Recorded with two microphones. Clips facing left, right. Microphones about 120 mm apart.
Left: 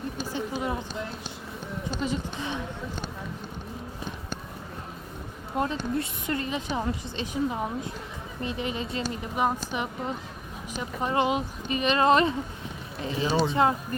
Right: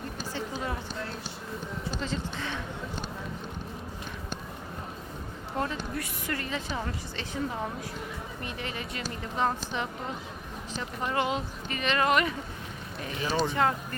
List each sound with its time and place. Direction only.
0.3 s a sound: 20° left (ahead or behind)
2.0 s speech: 15° left (ahead or behind)
5.5 s a woman's voice: 20° left (ahead or behind)
9.3 s a woman's voice: 15° left (ahead or behind)